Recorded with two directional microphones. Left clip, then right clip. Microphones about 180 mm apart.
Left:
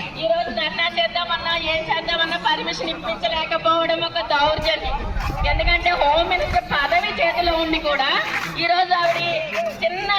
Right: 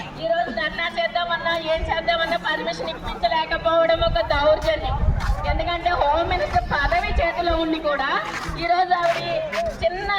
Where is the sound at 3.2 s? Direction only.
45° right (ahead or behind).